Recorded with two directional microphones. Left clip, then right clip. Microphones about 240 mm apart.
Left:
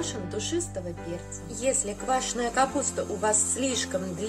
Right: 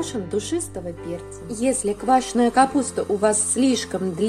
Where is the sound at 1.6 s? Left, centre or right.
Right.